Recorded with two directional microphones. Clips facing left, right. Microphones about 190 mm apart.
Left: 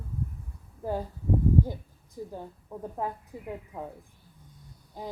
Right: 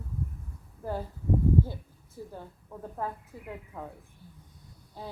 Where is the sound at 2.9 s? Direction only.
15° left (ahead or behind).